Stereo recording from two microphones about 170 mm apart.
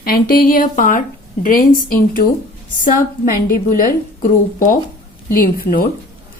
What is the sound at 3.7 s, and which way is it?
A woman's voice, 55° left (ahead or behind).